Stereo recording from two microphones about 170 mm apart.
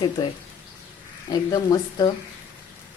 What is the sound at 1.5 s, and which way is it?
Speech, 20° left (ahead or behind).